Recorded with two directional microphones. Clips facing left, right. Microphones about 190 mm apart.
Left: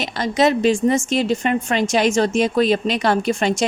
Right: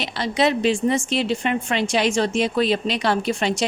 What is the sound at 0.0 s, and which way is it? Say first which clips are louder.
A woman's voice: left 3 dB; 45° left (ahead or behind).